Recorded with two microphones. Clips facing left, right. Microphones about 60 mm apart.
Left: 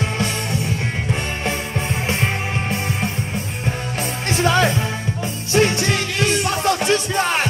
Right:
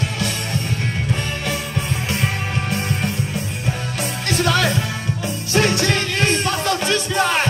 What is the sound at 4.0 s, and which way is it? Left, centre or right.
Music, left.